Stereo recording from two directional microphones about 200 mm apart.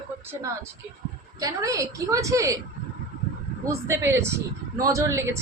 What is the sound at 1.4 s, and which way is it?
A woman's voice, 15° right (ahead or behind).